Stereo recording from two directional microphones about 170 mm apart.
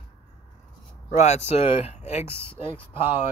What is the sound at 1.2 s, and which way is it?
Speech, 40° left (ahead or behind).